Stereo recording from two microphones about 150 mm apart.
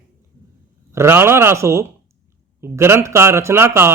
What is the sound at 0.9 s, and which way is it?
Speech, 15° right (ahead or behind).